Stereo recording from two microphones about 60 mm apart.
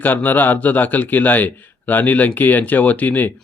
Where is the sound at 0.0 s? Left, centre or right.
Left.